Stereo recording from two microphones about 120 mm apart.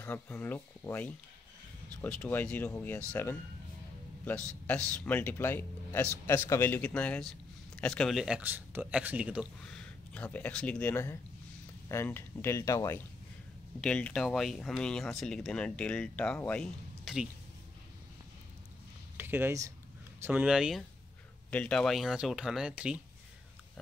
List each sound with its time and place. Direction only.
0.0 s speech: 15° left (ahead or behind)
4.9 s speech: 10° left (ahead or behind)
8.4 s speech: 15° right (ahead or behind)
9.7 s speech: 10° left (ahead or behind); by 13.0 s 25° left (ahead or behind)
13.7 s speech: 10° left (ahead or behind)
17.0 s a sound: 5° right (ahead or behind)
19.1 s speech: 20° right (ahead or behind)
20.3 s speech: 5° right (ahead or behind)
21.5 s speech: 10° left (ahead or behind); by 22.9 s 5° right (ahead or behind)